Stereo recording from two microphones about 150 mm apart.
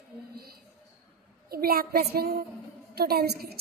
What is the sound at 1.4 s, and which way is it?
A woman's voice, 90° right.